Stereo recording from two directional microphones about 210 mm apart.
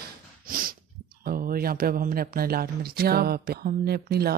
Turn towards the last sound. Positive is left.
turn(degrees=-45)  # may be behind; listen again after turning